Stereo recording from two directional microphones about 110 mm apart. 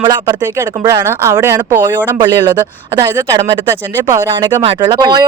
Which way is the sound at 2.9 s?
30° right (ahead or behind).